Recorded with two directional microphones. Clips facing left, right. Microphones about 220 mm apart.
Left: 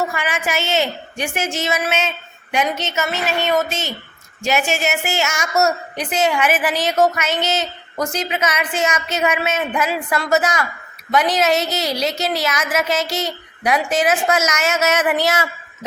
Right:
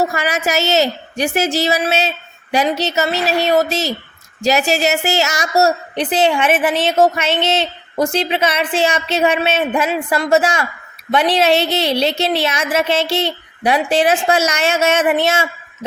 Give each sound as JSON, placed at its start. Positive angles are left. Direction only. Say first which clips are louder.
{"t": 0.0, "sound": "a woman's voice", "louder": "right 4 dB", "side_deg": -40}